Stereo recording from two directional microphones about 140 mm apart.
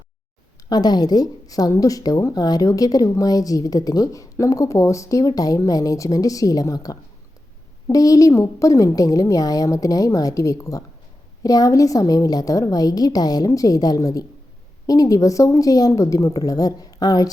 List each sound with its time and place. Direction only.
0.7 s a woman's voice: 30° left (ahead or behind)